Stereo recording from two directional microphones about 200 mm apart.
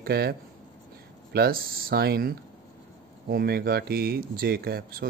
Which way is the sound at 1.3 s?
50° right (ahead or behind).